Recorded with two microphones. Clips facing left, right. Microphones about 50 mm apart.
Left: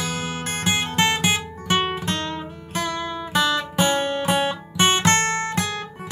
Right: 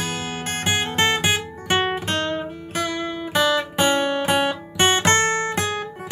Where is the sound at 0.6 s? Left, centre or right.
Right.